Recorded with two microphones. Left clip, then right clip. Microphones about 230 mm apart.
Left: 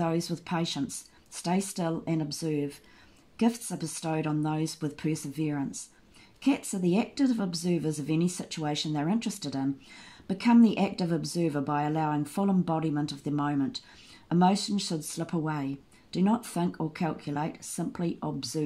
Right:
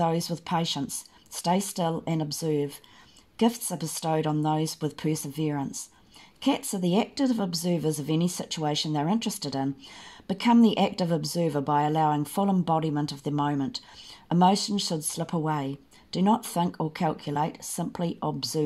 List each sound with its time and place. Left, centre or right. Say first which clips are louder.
0.0 s speech: right 4 dB; right